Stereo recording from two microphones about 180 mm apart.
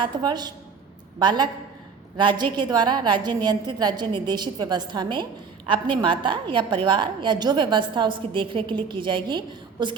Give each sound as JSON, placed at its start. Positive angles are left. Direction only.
{"t": 0.0, "sound": "a woman's voice", "side_deg": -25}